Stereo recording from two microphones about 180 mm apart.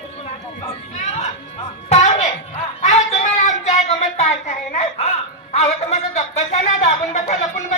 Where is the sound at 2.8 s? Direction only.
40° left (ahead or behind).